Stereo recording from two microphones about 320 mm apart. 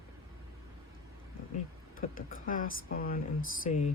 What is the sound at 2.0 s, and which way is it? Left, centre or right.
Speech, left.